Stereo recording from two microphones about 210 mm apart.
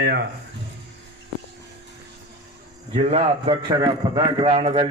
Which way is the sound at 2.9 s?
30° right (ahead or behind).